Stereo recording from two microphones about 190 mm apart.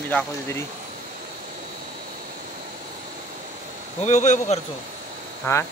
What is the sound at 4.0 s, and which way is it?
Speech, 40° left (ahead or behind).